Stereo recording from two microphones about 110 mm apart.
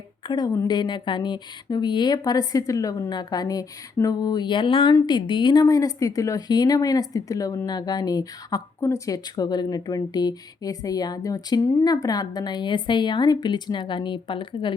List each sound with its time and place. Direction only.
0.3 s a woman's voice: 40° left (ahead or behind)
5.6 s a woman's voice: 30° left (ahead or behind); by 14.8 s 50° left (ahead or behind)